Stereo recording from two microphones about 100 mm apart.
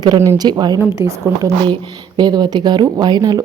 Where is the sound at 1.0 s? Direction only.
30° right (ahead or behind).